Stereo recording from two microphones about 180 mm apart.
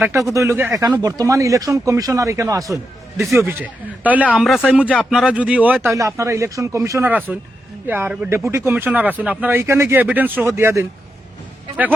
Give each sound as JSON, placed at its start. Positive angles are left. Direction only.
{"t": 0.3, "sound": "speech", "side_deg": -15}